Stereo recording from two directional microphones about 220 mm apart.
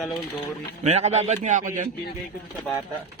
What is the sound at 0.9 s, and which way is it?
Speech, 30° right (ahead or behind).